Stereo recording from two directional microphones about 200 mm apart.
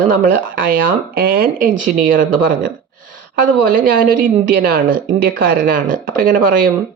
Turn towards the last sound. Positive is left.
turn(degrees=-45)  # may be behind; listen again after turning